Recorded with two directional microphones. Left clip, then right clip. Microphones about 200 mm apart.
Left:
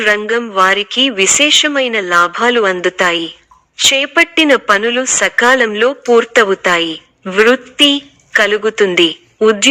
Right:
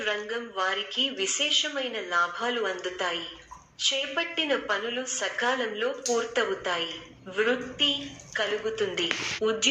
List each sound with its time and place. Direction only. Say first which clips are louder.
0.0 s a woman's voice: left 17 dB; 50° left (ahead or behind)